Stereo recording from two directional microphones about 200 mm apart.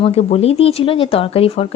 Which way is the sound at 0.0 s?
30° left (ahead or behind).